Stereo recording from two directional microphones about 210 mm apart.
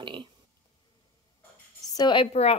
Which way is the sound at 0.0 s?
25° right (ahead or behind).